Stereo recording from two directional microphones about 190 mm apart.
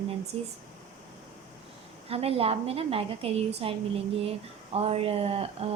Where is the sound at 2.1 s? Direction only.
30° right (ahead or behind).